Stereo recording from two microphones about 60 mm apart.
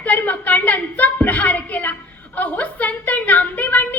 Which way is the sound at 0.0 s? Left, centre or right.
Left.